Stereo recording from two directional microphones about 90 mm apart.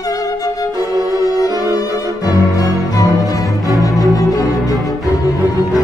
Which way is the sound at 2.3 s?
45° left (ahead or behind).